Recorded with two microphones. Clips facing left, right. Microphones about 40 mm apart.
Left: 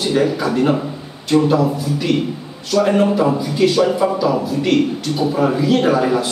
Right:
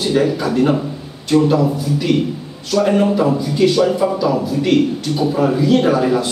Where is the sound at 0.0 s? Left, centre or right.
Centre.